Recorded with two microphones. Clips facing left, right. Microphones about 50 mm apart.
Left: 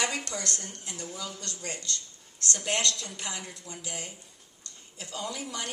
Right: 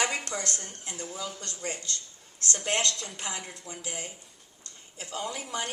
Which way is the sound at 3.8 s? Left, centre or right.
Right.